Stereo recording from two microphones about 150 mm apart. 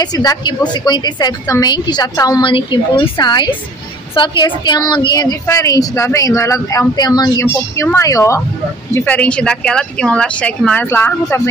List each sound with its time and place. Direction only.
0.0 s a woman's voice: 25° left (ahead or behind)